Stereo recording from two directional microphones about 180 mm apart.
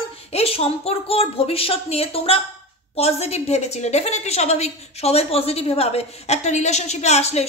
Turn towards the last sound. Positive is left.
turn(degrees=35)  # may be behind; listen again after turning